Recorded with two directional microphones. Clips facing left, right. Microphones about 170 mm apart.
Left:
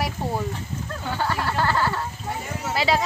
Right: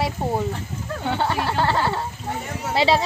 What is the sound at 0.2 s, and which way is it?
Speech, 25° right (ahead or behind).